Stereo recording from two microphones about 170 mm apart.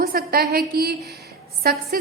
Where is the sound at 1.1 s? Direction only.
70° right (ahead or behind).